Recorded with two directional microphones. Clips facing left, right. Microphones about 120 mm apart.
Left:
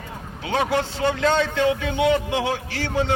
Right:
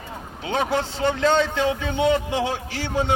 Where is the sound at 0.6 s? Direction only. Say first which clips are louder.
Left 1 dB; 25° right (ahead or behind).